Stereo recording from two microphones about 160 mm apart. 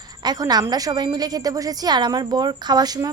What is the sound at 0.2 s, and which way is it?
A woman's voice, 25° right (ahead or behind).